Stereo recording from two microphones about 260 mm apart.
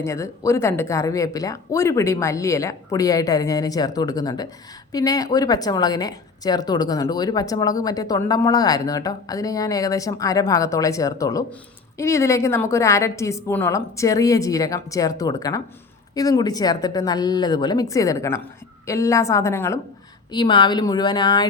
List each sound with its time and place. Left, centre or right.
0.0 s a woman's voice: centre